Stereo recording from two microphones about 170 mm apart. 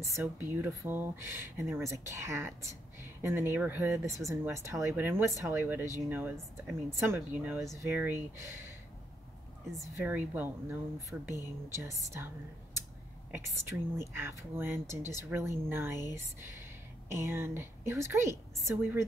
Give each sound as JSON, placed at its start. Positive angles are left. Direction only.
{"t": 0.0, "sound": "speech", "side_deg": -15}
{"t": 9.8, "sound": "speech", "side_deg": -15}
{"t": 12.0, "sound": "speech", "side_deg": -15}
{"t": 13.3, "sound": "speech", "side_deg": -15}
{"t": 17.1, "sound": "speech", "side_deg": -15}